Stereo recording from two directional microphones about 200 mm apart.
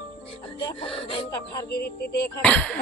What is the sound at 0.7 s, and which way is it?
Speech, 30° left (ahead or behind).